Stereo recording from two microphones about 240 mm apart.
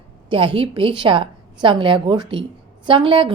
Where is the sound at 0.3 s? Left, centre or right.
Right.